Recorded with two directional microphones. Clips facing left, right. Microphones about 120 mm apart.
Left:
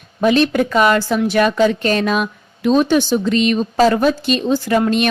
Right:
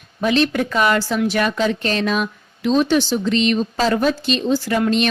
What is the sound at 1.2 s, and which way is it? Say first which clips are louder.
Speech: left 7 dB; 50° left (ahead or behind).